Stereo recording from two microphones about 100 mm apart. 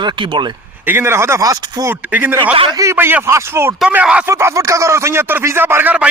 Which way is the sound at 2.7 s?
30° right (ahead or behind).